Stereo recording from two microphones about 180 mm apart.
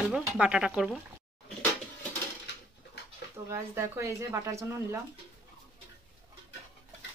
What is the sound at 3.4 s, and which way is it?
Speech, 15° right (ahead or behind).